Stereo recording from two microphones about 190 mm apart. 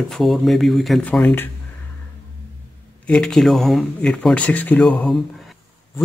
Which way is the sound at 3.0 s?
5° left (ahead or behind).